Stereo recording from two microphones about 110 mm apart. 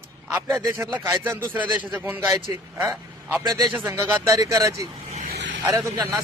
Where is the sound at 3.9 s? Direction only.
25° right (ahead or behind).